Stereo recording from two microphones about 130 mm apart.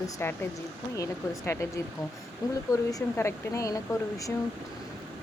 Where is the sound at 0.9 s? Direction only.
25° left (ahead or behind).